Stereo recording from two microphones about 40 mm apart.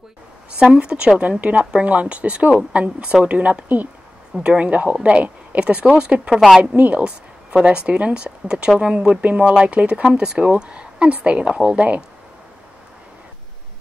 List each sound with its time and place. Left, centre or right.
0.6 s speech: right
4.4 s a woman's voice: right
10.0 s speech: centre